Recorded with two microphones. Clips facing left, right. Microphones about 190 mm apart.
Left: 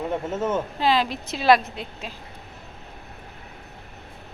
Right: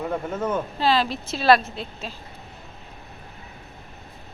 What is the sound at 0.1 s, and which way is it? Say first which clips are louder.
Speech: left 2 dB; 25° left (ahead or behind).